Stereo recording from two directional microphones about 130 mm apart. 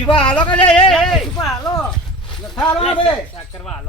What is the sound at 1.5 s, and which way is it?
Speech, 25° left (ahead or behind).